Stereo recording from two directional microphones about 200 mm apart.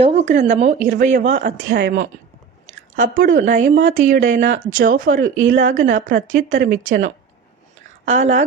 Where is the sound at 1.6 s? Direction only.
60° right (ahead or behind).